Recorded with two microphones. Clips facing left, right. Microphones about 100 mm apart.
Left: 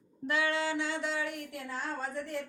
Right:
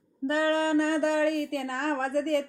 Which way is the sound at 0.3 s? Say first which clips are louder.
Right 6 dB; 40° right (ahead or behind).